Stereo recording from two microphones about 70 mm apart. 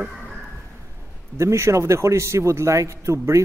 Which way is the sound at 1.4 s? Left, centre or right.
Right.